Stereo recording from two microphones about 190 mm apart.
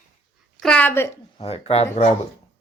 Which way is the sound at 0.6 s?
10° left (ahead or behind).